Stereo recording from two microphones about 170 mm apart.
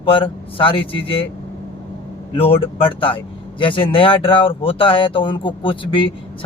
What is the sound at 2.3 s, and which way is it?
Speech, 35° left (ahead or behind).